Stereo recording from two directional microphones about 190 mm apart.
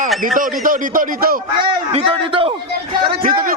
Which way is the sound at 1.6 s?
25° right (ahead or behind).